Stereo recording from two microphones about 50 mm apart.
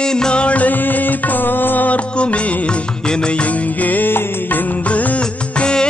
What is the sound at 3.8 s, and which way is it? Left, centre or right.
Music, left.